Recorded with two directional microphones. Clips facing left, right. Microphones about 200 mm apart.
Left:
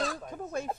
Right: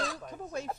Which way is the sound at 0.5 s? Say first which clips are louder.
Left 3 dB; 50° left (ahead or behind).